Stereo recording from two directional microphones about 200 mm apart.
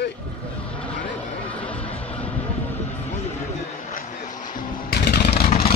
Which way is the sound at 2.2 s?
10° left (ahead or behind).